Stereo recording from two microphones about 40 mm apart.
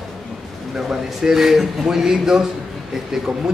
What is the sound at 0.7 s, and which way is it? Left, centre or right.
Speech, centre.